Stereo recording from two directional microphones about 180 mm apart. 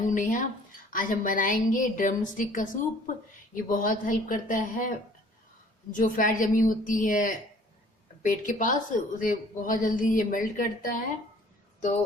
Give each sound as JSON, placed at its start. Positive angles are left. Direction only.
{"t": 0.0, "sound": "a woman's voice", "side_deg": 45}